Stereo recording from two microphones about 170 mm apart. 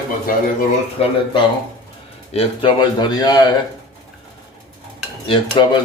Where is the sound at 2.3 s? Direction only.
35° left (ahead or behind).